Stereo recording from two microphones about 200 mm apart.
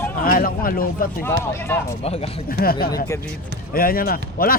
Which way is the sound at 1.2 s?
10° left (ahead or behind).